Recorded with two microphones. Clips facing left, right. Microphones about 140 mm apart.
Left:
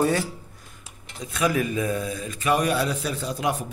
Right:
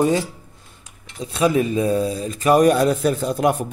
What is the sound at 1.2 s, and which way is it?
Speech, 30° right (ahead or behind).